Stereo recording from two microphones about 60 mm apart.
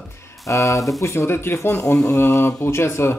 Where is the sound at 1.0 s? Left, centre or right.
Left.